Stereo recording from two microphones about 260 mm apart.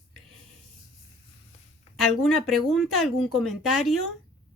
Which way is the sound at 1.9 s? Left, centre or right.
Centre.